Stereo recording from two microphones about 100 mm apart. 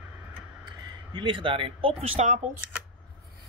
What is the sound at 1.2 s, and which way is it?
Speech, 60° right (ahead or behind).